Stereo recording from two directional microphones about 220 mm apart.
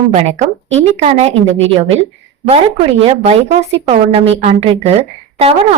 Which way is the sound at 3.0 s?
30° right (ahead or behind).